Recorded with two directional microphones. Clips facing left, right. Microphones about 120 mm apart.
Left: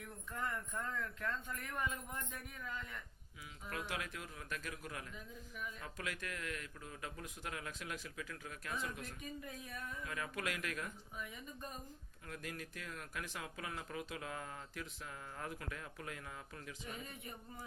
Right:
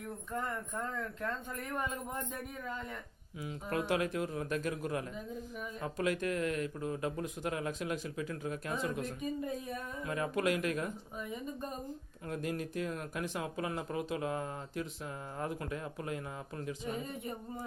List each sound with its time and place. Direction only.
0.3 s speech: 30° right (ahead or behind)
3.4 s speech: 40° right (ahead or behind)